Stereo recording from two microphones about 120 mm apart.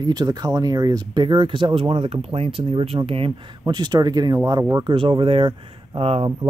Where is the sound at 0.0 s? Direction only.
35° right (ahead or behind).